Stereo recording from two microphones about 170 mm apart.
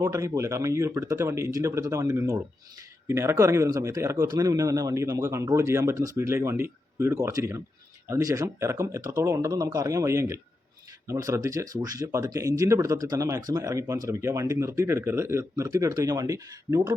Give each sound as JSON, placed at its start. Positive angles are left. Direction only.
{"t": 0.0, "sound": "speech", "side_deg": -20}